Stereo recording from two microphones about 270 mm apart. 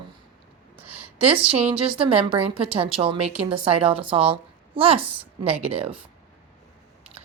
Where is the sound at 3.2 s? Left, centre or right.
Centre.